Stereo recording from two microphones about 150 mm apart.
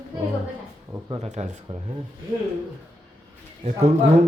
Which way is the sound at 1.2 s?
50° right (ahead or behind).